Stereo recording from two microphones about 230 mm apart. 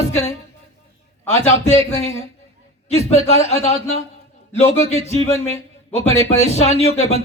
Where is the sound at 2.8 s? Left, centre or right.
Left.